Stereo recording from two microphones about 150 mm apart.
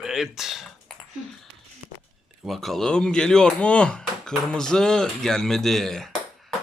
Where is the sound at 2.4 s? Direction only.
Centre (ahead or behind).